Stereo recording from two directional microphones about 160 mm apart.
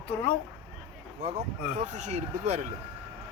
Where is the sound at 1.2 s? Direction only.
40° right (ahead or behind).